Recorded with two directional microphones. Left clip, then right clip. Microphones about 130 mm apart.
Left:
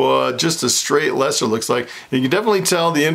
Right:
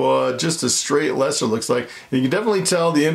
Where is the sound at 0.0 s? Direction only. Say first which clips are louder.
Left 2 dB; 25° left (ahead or behind).